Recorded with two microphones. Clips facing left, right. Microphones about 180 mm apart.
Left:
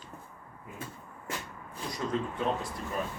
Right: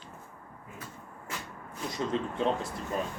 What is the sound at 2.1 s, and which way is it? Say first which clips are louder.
Speech: right 1 dB; 25° right (ahead or behind).